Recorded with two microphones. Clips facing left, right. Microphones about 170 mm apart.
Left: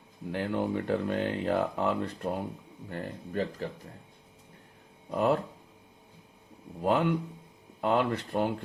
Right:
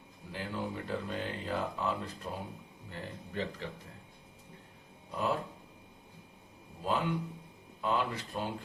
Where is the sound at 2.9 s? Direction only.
45° left (ahead or behind).